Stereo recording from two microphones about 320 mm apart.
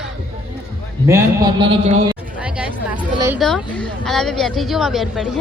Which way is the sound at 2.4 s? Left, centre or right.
Centre.